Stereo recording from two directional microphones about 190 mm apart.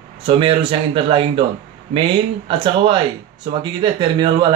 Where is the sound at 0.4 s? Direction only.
25° right (ahead or behind).